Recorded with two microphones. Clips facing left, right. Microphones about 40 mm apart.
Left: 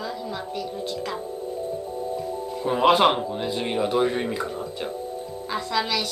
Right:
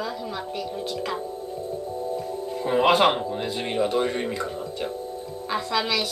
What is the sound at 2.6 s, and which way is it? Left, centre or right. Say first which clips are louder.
Speech: left 1 dB; centre.